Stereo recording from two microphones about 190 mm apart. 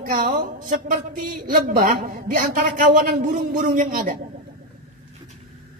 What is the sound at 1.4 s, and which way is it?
Speech, 50° right (ahead or behind).